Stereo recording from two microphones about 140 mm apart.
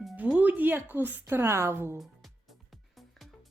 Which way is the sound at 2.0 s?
Centre (ahead or behind).